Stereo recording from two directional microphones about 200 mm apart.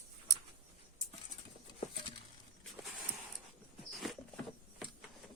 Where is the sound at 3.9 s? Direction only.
Centre (ahead or behind).